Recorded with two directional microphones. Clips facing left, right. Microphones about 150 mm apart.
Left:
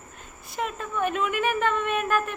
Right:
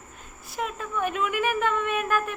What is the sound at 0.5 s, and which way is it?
Speech, 5° right (ahead or behind).